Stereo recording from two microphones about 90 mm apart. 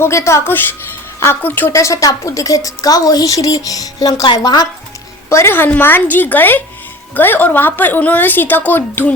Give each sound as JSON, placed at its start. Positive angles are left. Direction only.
{"t": 0.0, "sound": "a woman's voice", "side_deg": 30}
{"t": 1.7, "sound": "a woman's voice", "side_deg": 35}
{"t": 5.3, "sound": "a woman's voice", "side_deg": 30}